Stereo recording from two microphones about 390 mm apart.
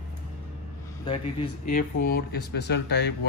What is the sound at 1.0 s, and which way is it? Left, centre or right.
Speech, centre.